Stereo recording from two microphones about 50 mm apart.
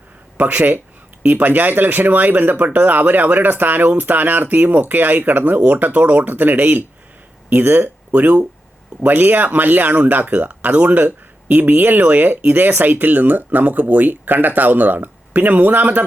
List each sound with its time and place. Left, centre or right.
0.3 s speech: right
8.1 s speech: right